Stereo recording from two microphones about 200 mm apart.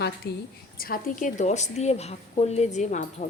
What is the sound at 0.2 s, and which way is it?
A woman's voice, 50° left (ahead or behind).